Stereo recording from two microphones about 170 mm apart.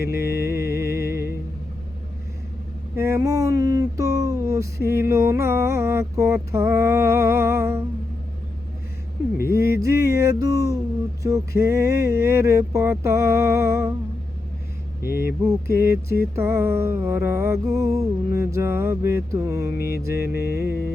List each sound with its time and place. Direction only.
0.0 s music: 15° right (ahead or behind)
2.9 s a sound: 15° right (ahead or behind)
9.4 s music: 15° right (ahead or behind)
15.0 s music: 15° right (ahead or behind)